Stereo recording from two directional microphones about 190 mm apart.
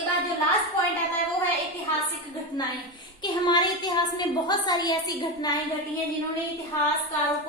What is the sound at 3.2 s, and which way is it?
A woman's voice, 20° left (ahead or behind).